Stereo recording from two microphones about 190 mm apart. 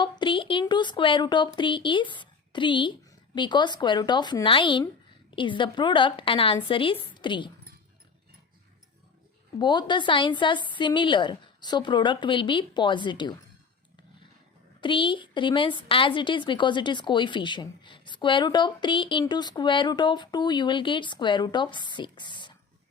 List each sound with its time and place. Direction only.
0.0 s a woman's voice: 25° left (ahead or behind)
9.6 s a woman's voice: 25° left (ahead or behind)
14.8 s a woman's voice: 25° left (ahead or behind)